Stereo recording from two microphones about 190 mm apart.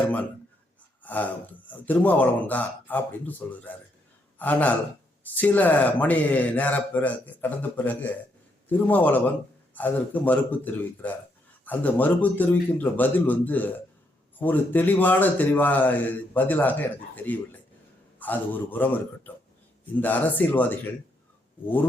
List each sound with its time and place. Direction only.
1.0 s speech: 10° left (ahead or behind)